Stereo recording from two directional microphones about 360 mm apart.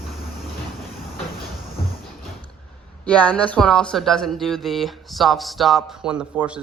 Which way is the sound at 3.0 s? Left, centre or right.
Centre.